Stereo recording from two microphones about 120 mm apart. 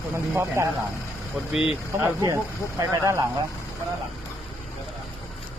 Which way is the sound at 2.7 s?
25° right (ahead or behind).